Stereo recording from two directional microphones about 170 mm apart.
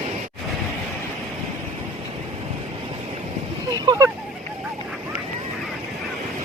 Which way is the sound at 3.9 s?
20° right (ahead or behind).